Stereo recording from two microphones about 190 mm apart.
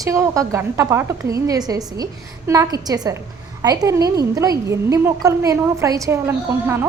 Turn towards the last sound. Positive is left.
turn(degrees=-15)  # may be behind; listen again after turning